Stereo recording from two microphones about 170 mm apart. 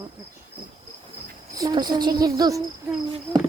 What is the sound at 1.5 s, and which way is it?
Speech, 25° right (ahead or behind).